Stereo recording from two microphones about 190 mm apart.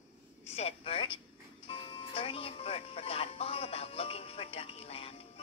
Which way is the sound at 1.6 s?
25° left (ahead or behind).